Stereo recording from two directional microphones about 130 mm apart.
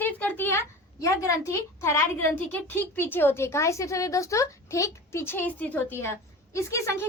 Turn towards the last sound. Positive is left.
turn(degrees=20)  # may be behind; listen again after turning